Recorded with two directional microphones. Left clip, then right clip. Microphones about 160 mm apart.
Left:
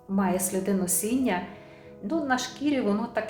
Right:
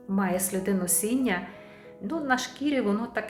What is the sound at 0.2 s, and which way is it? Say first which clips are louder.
A woman's voice: left 1 dB; 30° right (ahead or behind).